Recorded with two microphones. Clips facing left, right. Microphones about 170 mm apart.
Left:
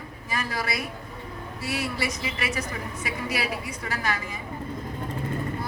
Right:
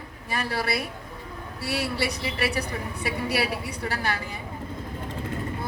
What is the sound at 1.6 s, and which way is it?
A woman's voice, 65° right (ahead or behind).